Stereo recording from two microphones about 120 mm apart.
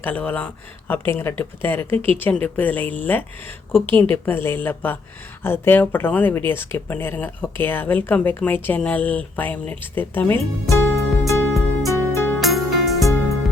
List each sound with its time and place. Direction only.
0.0 s speech: 15° left (ahead or behind)
3.8 s a woman's voice: 45° right (ahead or behind)
4.1 s speech: 20° left (ahead or behind)
11.9 s music: 20° left (ahead or behind)
12.4 s music: centre (ahead or behind)